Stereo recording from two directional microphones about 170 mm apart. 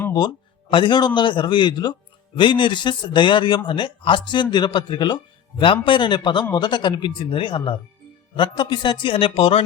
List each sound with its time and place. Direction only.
0.1 s a man's voice: 25° left (ahead or behind)